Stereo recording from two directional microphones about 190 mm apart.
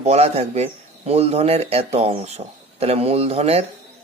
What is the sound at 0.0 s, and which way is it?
A man's voice, 35° right (ahead or behind).